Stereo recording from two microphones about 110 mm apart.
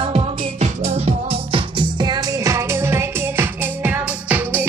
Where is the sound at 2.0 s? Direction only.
40° right (ahead or behind).